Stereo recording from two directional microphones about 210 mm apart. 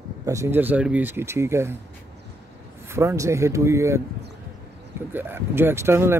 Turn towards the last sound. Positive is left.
turn(degrees=-10)  # may be behind; listen again after turning